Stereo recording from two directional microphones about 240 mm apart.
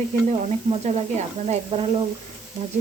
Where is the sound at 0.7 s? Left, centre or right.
Right.